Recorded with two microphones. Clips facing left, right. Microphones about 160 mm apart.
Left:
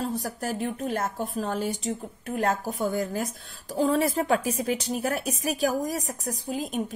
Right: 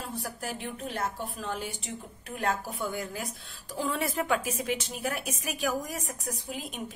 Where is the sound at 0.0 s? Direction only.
40° left (ahead or behind).